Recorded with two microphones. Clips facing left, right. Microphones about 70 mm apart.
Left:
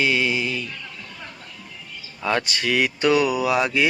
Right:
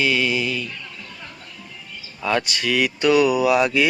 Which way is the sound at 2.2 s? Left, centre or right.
Left.